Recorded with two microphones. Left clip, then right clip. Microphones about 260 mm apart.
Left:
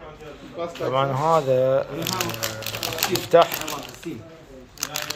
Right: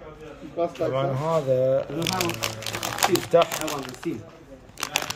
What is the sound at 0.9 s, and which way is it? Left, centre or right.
Speech, centre.